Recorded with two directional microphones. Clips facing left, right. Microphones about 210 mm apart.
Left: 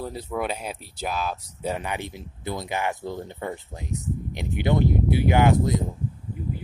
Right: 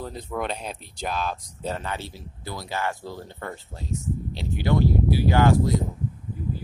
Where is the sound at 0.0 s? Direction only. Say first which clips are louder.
Left 1 dB; 5° left (ahead or behind).